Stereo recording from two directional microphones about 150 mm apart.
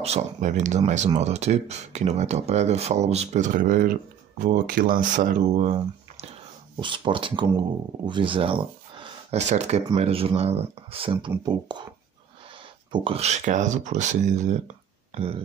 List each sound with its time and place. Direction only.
0.0 s speech: 50° right (ahead or behind)
6.8 s speech: 35° right (ahead or behind)
9.4 s speech: 50° right (ahead or behind); by 11.9 s 30° right (ahead or behind)
12.9 s speech: 40° right (ahead or behind)